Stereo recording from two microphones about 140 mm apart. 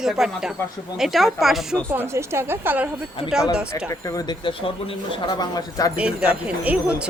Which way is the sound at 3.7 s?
25° left (ahead or behind).